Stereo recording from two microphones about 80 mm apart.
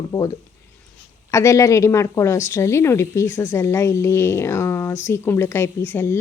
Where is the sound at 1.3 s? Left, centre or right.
Left.